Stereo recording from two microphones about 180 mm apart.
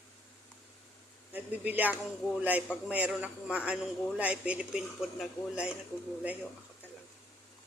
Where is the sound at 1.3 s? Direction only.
10° right (ahead or behind).